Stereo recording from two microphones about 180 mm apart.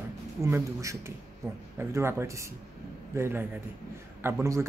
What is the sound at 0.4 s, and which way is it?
Speech, 15° right (ahead or behind).